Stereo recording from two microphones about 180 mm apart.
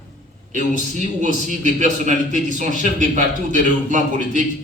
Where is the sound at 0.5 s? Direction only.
45° left (ahead or behind).